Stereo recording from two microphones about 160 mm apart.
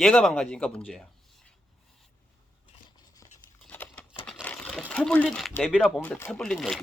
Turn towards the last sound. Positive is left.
turn(degrees=0)  # may be behind; listen again after turning